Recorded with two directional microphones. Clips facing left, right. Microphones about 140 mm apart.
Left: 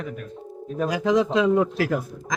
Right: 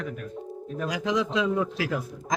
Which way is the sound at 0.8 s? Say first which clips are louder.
Left 6 dB; 50° left (ahead or behind).